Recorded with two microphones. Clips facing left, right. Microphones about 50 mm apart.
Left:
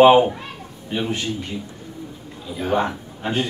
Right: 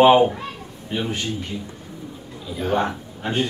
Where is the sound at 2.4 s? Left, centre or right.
Centre.